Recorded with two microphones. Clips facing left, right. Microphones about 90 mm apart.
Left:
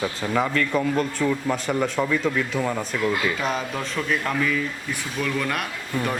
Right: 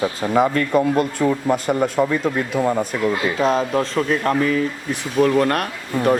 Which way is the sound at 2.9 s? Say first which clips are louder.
Right 4 dB; 25° right (ahead or behind).